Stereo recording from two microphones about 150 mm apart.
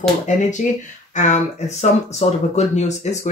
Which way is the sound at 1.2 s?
50° left (ahead or behind).